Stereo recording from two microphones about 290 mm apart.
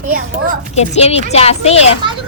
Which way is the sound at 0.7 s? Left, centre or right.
Left.